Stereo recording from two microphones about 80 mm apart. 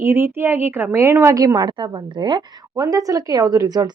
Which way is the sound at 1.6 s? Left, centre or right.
Right.